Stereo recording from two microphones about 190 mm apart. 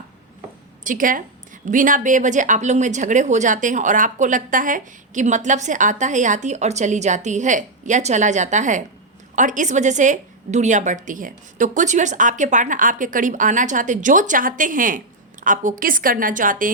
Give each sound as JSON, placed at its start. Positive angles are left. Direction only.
{"t": 0.9, "sound": "a woman's voice", "side_deg": -45}